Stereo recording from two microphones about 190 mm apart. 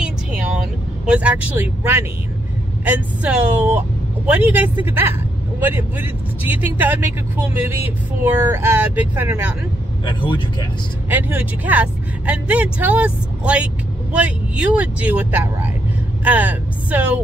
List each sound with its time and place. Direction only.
1.0 s speech: 5° right (ahead or behind)
2.8 s speech: 10° right (ahead or behind)
10.0 s speech: 25° left (ahead or behind)
11.1 s speech: 10° right (ahead or behind)